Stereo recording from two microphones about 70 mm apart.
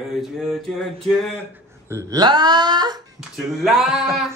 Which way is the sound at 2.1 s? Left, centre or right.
Right.